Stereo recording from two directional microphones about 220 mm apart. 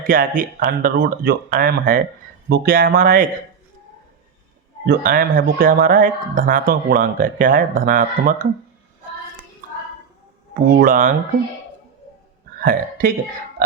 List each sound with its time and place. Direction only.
0.0 s speech: 40° right (ahead or behind)
4.9 s speech: 40° right (ahead or behind)
10.5 s speech: 40° right (ahead or behind)
12.5 s speech: 40° right (ahead or behind)